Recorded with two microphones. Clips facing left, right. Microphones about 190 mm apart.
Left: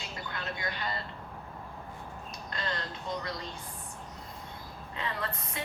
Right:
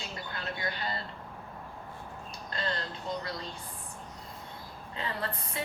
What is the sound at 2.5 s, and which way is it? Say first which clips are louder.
Speech: right 2 dB; 30° right (ahead or behind).